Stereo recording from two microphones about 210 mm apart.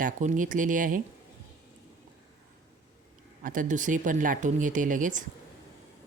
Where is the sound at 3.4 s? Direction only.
40° right (ahead or behind).